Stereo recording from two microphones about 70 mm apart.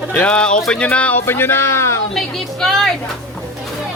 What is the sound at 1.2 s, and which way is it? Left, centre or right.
Speech, left.